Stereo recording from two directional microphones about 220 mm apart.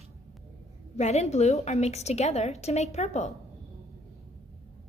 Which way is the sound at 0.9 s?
30° left (ahead or behind).